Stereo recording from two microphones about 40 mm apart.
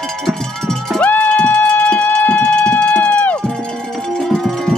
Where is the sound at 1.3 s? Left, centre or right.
Left.